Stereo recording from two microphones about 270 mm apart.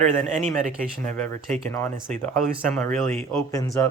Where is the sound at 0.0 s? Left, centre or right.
Right.